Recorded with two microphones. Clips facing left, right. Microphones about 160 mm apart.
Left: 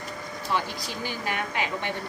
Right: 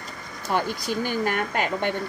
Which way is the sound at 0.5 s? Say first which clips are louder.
Right 5 dB; 50° right (ahead or behind).